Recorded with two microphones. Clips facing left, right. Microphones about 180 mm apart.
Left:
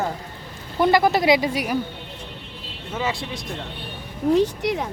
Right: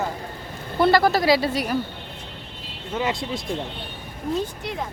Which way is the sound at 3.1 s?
20° right (ahead or behind).